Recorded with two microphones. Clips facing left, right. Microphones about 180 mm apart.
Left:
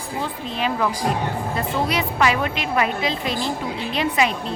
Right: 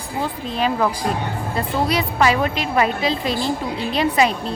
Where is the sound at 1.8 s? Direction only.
35° right (ahead or behind).